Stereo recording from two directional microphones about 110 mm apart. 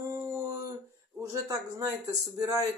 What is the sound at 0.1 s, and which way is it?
Dog, 25° right (ahead or behind).